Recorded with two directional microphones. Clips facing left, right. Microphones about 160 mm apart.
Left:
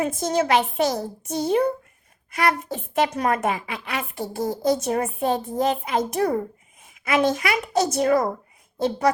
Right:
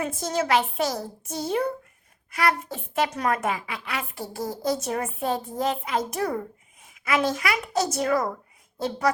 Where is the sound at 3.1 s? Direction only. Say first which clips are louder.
Left 3 dB; 35° left (ahead or behind).